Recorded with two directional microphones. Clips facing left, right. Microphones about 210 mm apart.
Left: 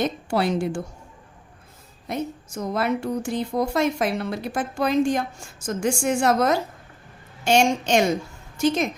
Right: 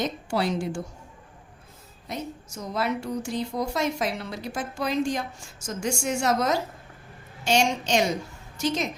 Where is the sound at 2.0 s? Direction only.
55° left (ahead or behind).